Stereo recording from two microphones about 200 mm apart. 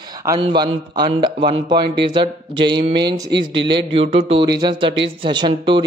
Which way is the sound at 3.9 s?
30° right (ahead or behind).